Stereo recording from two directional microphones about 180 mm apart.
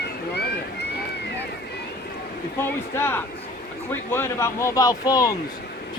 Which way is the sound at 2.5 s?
10° left (ahead or behind).